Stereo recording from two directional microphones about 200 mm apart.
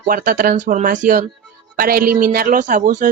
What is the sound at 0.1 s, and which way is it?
Speech, 40° right (ahead or behind).